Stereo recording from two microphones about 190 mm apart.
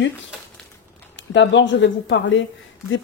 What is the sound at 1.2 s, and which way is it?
Speech, 70° left (ahead or behind).